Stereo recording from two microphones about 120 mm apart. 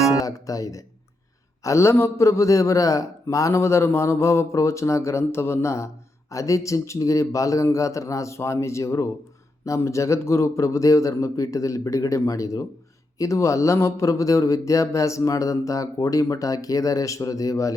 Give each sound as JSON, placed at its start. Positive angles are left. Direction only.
{"t": 0.2, "sound": "speech", "side_deg": 30}